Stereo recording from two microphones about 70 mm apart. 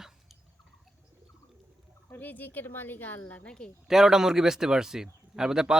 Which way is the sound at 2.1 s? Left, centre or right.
Left.